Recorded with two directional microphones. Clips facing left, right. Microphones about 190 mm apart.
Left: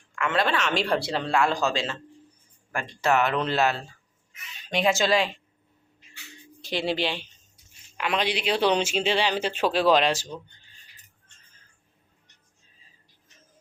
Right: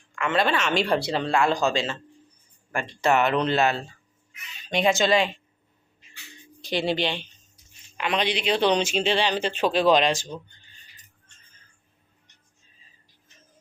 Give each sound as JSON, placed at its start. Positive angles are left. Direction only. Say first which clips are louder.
{"t": 0.2, "sound": "speech", "louder": "right 1 dB", "side_deg": 0}
{"t": 6.6, "sound": "speech", "louder": "right 2 dB", "side_deg": 0}